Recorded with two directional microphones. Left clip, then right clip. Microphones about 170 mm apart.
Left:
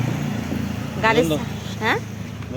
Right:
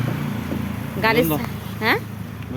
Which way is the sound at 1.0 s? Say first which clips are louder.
Left 1 dB; 25° right (ahead or behind).